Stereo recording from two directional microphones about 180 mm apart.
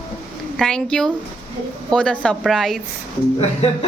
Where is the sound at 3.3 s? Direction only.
35° left (ahead or behind).